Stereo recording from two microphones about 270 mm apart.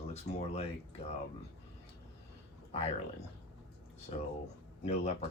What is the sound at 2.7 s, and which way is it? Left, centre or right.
Speech, left.